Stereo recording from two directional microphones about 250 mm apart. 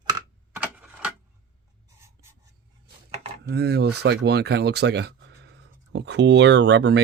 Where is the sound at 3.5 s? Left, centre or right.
Right.